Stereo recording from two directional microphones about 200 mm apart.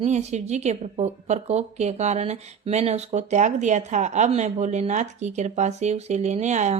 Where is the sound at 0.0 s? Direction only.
35° right (ahead or behind).